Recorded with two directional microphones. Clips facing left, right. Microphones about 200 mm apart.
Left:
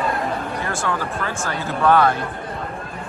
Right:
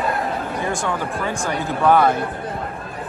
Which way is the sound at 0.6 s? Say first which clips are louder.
Right 1 dB; 15° right (ahead or behind).